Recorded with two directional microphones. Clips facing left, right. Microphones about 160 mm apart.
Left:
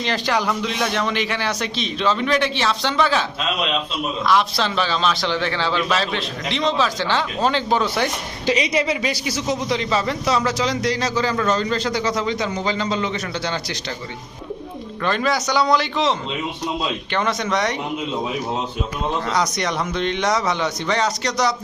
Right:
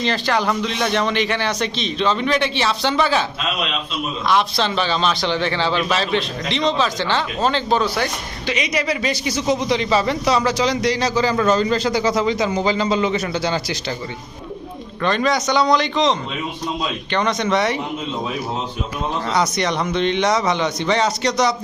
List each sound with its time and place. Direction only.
0.0 s a man's voice: 15° left (ahead or behind); by 3.2 s 5° right (ahead or behind)
4.6 s a man's voice: centre (ahead or behind)
8.4 s a woman's voice: 35° left (ahead or behind)
9.0 s a man's voice: 10° left (ahead or behind); by 13.7 s 5° right (ahead or behind)
15.0 s a man's voice: 5° left (ahead or behind)
19.3 s a man's voice: centre (ahead or behind)
21.2 s speech: 20° right (ahead or behind)